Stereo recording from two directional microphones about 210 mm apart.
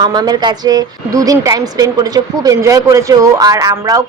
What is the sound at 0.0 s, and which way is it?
A woman's voice, 20° right (ahead or behind).